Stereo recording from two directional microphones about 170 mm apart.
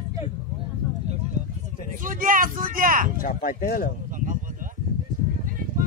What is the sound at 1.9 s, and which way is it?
Speech, 50° right (ahead or behind).